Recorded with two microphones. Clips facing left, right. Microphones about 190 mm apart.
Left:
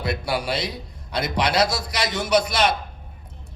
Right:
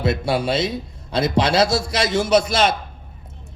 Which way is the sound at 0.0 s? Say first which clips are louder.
Right 5 dB; 25° right (ahead or behind).